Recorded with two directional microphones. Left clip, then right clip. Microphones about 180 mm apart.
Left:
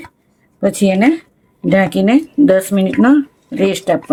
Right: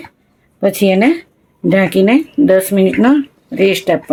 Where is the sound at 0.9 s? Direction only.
25° right (ahead or behind).